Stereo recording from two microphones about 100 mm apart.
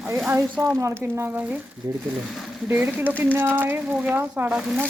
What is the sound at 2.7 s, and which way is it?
Speech, 20° right (ahead or behind).